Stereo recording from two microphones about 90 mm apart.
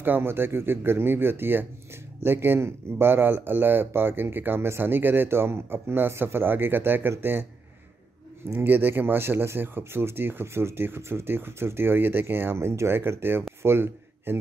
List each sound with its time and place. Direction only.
0.0 s speech: 25° right (ahead or behind)
8.5 s a man's voice: 25° right (ahead or behind)